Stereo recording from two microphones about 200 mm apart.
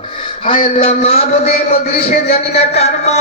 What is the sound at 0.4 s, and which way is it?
A man's voice, 25° left (ahead or behind).